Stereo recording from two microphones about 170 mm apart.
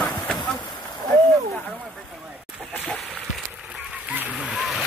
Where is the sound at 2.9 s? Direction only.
Centre (ahead or behind).